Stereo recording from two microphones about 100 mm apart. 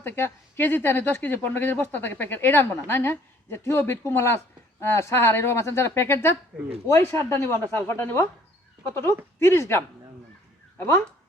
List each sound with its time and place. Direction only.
0.0 s speech: 20° left (ahead or behind)